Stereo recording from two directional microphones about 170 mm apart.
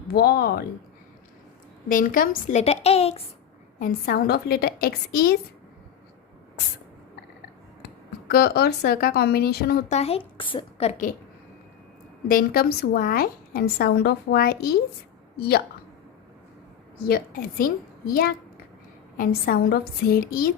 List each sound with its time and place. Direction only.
0.1 s speech: 65° left (ahead or behind)
1.9 s a woman's voice: 55° left (ahead or behind); by 3.2 s 35° left (ahead or behind)
3.8 s a woman's voice: 55° left (ahead or behind)
8.3 s a woman's voice: 65° left (ahead or behind)
9.9 s a woman's voice: 35° left (ahead or behind)
12.3 s a woman's voice: 60° left (ahead or behind)
17.0 s a woman's voice: 60° left (ahead or behind)